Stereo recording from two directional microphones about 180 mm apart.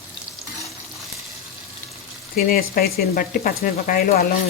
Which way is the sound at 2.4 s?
55° left (ahead or behind).